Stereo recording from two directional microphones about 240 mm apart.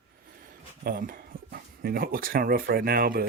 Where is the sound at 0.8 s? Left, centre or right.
Right.